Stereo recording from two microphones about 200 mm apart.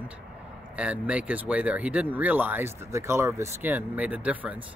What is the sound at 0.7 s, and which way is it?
Speech, 5° right (ahead or behind).